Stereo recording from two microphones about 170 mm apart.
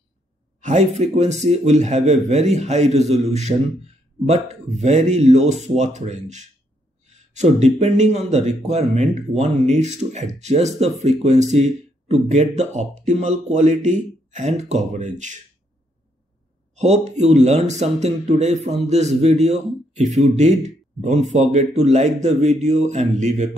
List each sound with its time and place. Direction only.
0.6 s a man's voice: 45° right (ahead or behind)
16.7 s a man's voice: 40° right (ahead or behind)